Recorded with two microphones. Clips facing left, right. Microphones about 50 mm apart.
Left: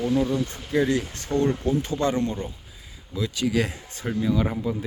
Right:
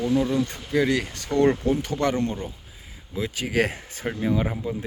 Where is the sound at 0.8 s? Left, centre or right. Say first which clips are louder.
Even; right.